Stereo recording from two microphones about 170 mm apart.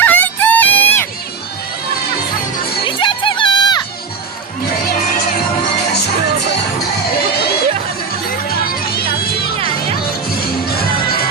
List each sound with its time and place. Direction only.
0.0 s music: 10° left (ahead or behind)
2.8 s music: 30° left (ahead or behind)
8.4 s music: 65° left (ahead or behind)
10.7 s music: 60° left (ahead or behind)